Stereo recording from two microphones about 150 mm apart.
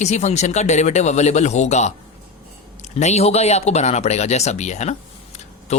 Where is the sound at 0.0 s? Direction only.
50° left (ahead or behind).